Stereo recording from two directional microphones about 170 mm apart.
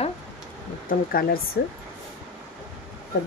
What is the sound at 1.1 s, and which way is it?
Speech, 60° left (ahead or behind).